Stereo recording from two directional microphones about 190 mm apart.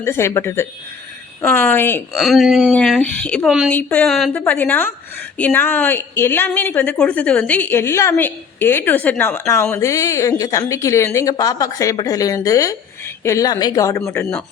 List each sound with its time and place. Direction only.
0.0 s speech: 15° left (ahead or behind)
2.1 s speech: centre (ahead or behind)
3.7 s speech: 10° left (ahead or behind)